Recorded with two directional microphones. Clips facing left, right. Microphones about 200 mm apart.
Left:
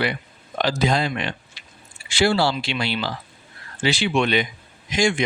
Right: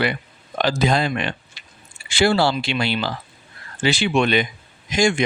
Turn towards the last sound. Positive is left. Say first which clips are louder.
# right 2 dB
turn(degrees=-45)  # may be behind; listen again after turning